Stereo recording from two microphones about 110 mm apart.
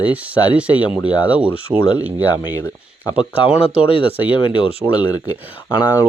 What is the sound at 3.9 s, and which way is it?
Speech, 55° left (ahead or behind).